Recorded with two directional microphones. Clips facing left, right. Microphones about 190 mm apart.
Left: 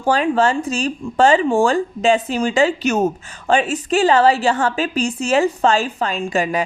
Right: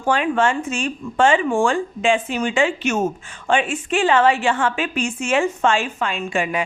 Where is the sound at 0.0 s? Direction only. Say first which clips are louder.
Left 2 dB; 35° left (ahead or behind).